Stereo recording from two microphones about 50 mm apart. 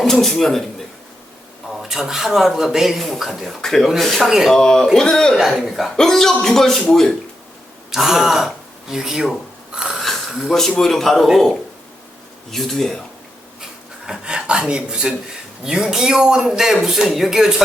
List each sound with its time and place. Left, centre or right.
0.0 s speech: centre
1.8 s speech: centre
3.6 s a man's voice: centre
4.2 s speech: centre
4.4 s a man's voice: centre
5.4 s speech: centre
6.0 s a man's voice: centre
7.9 s speech: centre
9.7 s a sound: centre
10.8 s speech: centre
12.5 s speech: centre
14.1 s speech: centre